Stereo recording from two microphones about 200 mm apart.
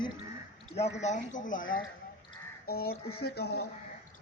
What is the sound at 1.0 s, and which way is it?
Speech, 35° left (ahead or behind).